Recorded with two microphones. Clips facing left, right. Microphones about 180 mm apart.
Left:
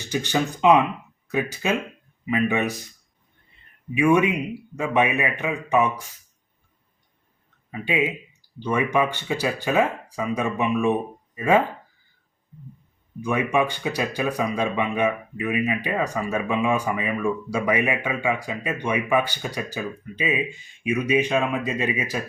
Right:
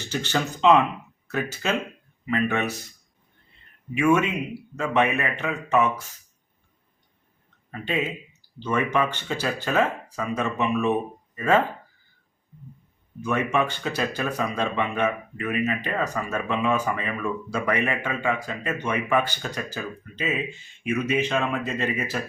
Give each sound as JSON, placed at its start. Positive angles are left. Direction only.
{"t": 0.0, "sound": "speech", "side_deg": 15}
{"t": 4.0, "sound": "speech", "side_deg": 15}
{"t": 7.7, "sound": "speech", "side_deg": 10}
{"t": 13.2, "sound": "speech", "side_deg": 15}